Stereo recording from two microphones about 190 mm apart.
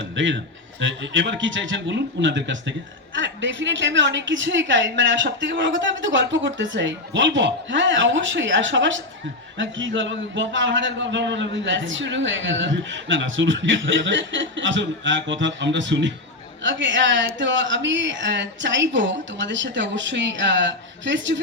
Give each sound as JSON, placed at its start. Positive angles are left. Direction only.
{"t": 0.2, "sound": "a man's voice", "side_deg": -75}